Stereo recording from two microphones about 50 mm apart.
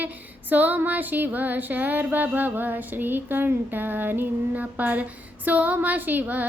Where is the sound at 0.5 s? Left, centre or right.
Right.